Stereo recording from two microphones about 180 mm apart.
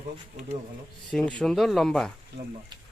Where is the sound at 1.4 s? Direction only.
Centre (ahead or behind).